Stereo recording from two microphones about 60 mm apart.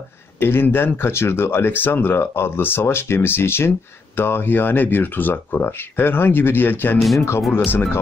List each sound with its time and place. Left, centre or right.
0.4 s speech: left
7.2 s speech: left
7.5 s speech: left